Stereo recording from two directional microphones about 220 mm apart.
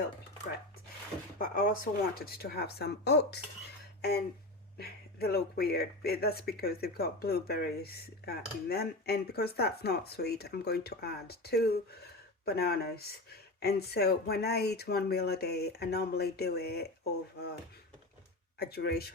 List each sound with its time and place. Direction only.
1.4 s speech: 40° left (ahead or behind)
4.8 s speech: 45° left (ahead or behind)
18.6 s speech: 45° left (ahead or behind)